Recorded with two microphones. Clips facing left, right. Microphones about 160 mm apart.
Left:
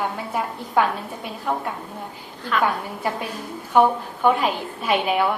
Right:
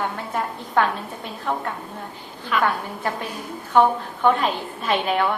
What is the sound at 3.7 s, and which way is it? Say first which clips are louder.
A woman's voice: even; 10° left (ahead or behind).